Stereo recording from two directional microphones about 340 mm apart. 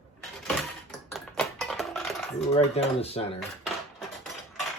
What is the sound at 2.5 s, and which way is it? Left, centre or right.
Speech, centre.